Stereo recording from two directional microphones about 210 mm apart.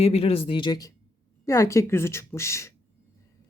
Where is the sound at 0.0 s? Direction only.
30° left (ahead or behind).